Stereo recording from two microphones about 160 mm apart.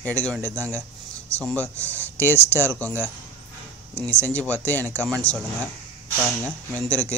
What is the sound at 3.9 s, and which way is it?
Speech, 10° left (ahead or behind).